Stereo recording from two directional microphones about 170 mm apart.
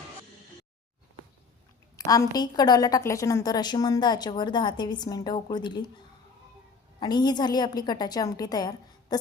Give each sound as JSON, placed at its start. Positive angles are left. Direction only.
{"t": 2.0, "sound": "a woman's voice", "side_deg": 20}
{"t": 7.0, "sound": "a woman's voice", "side_deg": 25}